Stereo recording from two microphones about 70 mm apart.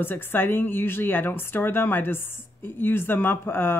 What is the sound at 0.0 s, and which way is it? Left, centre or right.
A woman's voice, left.